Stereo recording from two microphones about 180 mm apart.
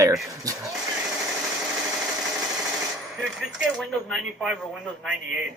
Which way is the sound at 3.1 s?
5° right (ahead or behind).